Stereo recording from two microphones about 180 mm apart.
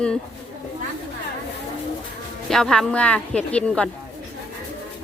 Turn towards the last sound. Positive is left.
turn(degrees=5)  # may be behind; listen again after turning